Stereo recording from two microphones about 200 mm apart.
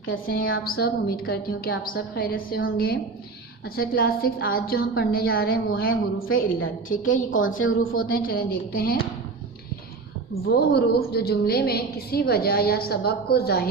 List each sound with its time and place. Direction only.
0.3 s a woman's voice: 45° left (ahead or behind)
5.9 s a woman's voice: 90° left
6.8 s a woman's voice: 40° left (ahead or behind)
7.3 s a woman's voice: 80° left
7.9 s a woman's voice: 45° left (ahead or behind)
10.4 s a woman's voice: 55° left (ahead or behind)